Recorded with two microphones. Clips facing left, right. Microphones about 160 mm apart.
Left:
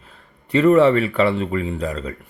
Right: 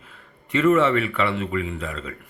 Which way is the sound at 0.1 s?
35° left (ahead or behind).